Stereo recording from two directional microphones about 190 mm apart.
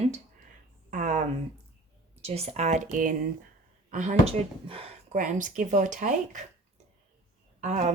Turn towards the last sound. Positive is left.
turn(degrees=-40)  # may be behind; listen again after turning